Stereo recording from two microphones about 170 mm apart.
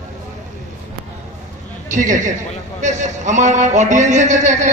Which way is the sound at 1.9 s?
50° right (ahead or behind).